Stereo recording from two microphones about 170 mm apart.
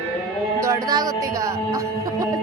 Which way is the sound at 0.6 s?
20° right (ahead or behind).